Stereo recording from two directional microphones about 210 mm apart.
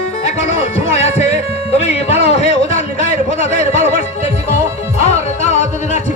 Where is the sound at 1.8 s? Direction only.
30° left (ahead or behind).